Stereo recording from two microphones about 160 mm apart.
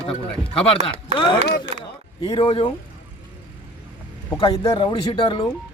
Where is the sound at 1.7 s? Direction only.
35° right (ahead or behind).